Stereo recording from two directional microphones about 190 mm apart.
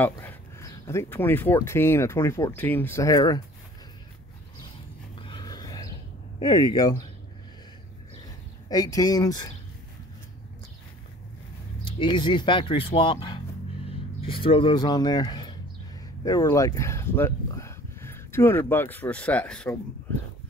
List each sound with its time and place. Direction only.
0.0 s speech: 10° left (ahead or behind)
5.1 s a sound: 25° left (ahead or behind)
6.4 s speech: 20° left (ahead or behind)
8.6 s speech: 20° left (ahead or behind)
11.8 s speech: 25° left (ahead or behind); by 19.8 s 5° left (ahead or behind)